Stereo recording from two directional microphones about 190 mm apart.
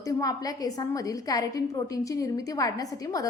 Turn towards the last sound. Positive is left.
turn(degrees=20)  # may be behind; listen again after turning